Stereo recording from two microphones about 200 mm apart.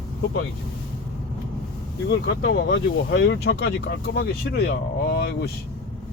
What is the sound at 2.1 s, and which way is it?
Speech, 55° left (ahead or behind).